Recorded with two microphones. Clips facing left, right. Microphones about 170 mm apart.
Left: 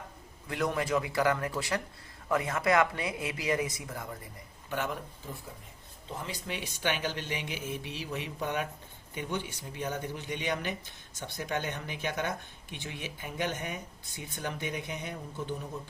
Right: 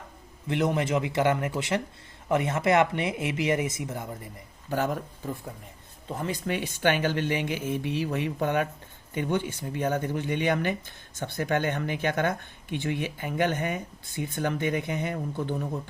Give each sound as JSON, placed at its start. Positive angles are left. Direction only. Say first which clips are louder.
{"t": 0.4, "sound": "speech", "louder": "right 5 dB", "side_deg": -25}
{"t": 4.7, "sound": "speech", "louder": "right 6 dB", "side_deg": -40}
{"t": 6.2, "sound": "speech", "louder": "right 10 dB", "side_deg": -50}